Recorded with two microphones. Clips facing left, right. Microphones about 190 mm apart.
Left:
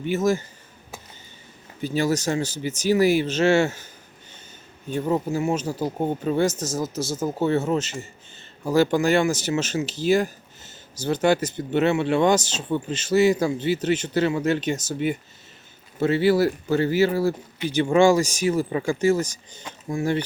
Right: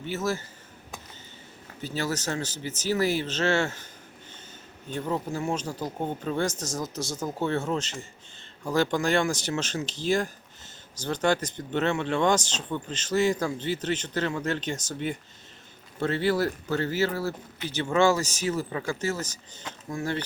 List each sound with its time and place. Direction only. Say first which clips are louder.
0.0 s a man's voice: left 7 dB; 15° left (ahead or behind)
1.8 s a man's voice: left 7 dB; 15° left (ahead or behind)
4.9 s a man's voice: left 6 dB; 10° left (ahead or behind)